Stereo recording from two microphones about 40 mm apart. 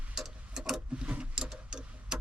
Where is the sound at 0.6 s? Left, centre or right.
Right.